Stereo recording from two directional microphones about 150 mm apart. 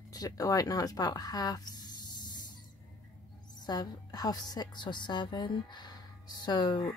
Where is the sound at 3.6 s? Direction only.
25° left (ahead or behind).